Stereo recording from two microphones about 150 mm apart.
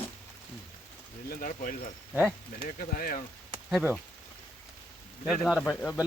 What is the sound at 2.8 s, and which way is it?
Speech, 70° left (ahead or behind).